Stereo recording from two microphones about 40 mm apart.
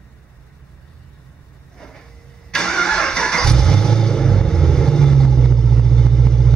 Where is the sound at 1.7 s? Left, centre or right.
Centre.